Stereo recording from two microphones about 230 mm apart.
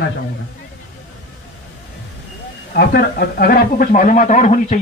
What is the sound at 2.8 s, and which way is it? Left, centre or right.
Speech, left.